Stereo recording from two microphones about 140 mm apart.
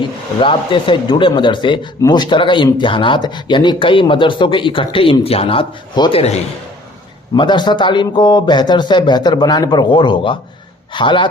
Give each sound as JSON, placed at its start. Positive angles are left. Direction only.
{"t": 0.3, "sound": "speech", "side_deg": 35}
{"t": 7.3, "sound": "speech", "side_deg": 30}